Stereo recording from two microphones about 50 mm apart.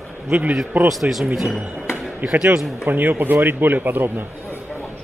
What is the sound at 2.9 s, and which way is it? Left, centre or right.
Speech, right.